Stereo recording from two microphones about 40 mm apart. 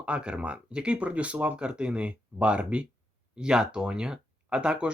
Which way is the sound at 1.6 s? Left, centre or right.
Right.